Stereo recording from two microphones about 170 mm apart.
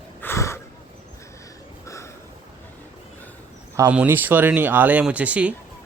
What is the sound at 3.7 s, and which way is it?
Speech, 20° right (ahead or behind).